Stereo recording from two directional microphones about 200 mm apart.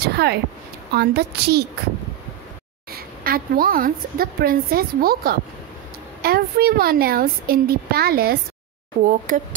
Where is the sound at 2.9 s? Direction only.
50° right (ahead or behind).